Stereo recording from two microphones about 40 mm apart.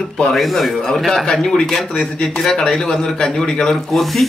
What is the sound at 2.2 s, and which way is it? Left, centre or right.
A man's voice, centre.